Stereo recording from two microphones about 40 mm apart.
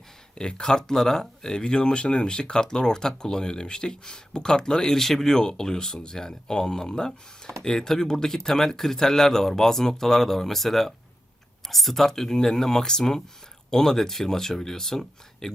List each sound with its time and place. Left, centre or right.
0.3 s speech: left